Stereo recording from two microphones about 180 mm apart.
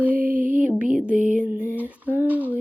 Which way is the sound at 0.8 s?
5° right (ahead or behind).